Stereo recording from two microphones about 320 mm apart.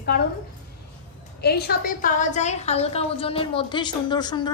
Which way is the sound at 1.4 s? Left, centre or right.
Left.